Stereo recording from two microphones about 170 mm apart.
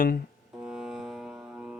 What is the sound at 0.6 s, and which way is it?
Music, 5° right (ahead or behind).